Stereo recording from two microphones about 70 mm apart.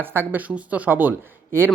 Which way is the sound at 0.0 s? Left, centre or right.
Right.